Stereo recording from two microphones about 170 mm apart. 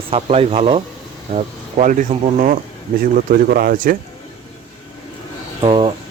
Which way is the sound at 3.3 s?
55° right (ahead or behind).